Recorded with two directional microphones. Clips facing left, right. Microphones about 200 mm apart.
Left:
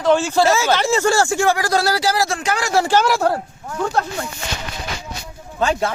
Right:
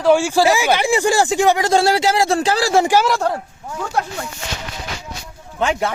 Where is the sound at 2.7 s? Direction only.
15° right (ahead or behind).